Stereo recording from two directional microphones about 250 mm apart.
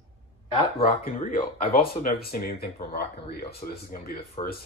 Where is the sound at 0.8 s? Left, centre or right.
Left.